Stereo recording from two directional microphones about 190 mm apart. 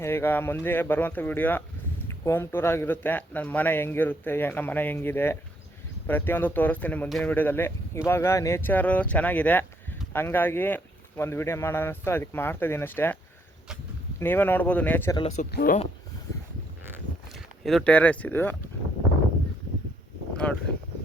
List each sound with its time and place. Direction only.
0.0 s speech: 10° left (ahead or behind)
14.2 s speech: 10° left (ahead or behind)
15.5 s speech: 50° left (ahead or behind)
17.3 s speech: centre (ahead or behind)
20.4 s speech: 5° left (ahead or behind)